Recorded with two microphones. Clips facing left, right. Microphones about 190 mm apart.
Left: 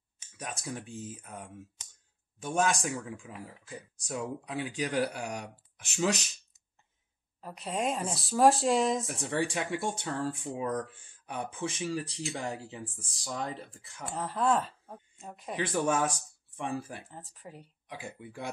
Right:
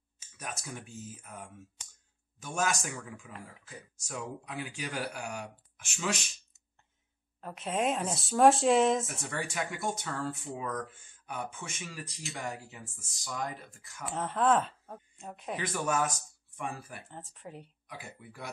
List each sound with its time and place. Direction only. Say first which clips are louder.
0.5 s speech: left 3 dB; 30° left (ahead or behind)
7.3 s speech: right 2 dB; centre (ahead or behind)
9.0 s speech: left 6 dB; 30° left (ahead or behind)
14.0 s speech: right 1 dB; centre (ahead or behind)
15.6 s speech: left 3 dB; 30° left (ahead or behind)
17.1 s speech: right 2 dB; centre (ahead or behind)
18.2 s speech: left 5 dB; 25° left (ahead or behind)